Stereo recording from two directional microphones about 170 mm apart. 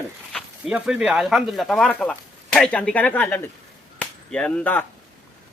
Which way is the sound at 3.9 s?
5° left (ahead or behind).